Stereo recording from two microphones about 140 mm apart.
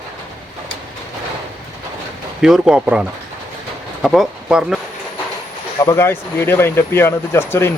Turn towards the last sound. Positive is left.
turn(degrees=15)  # may be behind; listen again after turning